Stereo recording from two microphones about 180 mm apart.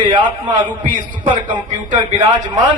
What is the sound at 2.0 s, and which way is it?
Speech, 25° right (ahead or behind).